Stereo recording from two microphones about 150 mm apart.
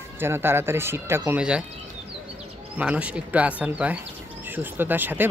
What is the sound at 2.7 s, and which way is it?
Speech, 10° right (ahead or behind).